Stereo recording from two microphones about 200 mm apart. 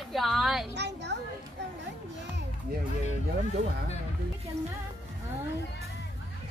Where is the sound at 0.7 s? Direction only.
60° right (ahead or behind).